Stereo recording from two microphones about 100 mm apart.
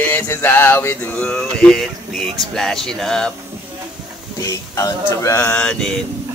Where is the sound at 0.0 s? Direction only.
20° left (ahead or behind).